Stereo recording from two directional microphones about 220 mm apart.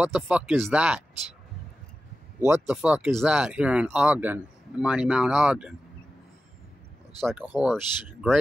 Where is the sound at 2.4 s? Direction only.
5° right (ahead or behind).